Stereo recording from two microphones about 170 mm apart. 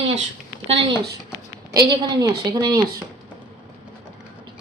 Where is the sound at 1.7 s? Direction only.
25° right (ahead or behind).